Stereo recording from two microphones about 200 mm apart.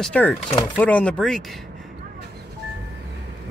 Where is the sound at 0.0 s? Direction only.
5° left (ahead or behind).